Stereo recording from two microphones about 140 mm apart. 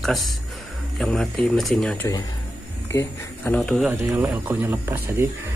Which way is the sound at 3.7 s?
10° right (ahead or behind).